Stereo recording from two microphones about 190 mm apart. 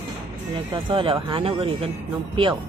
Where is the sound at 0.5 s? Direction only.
25° right (ahead or behind).